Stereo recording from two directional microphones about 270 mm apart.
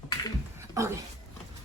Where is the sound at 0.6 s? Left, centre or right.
Centre.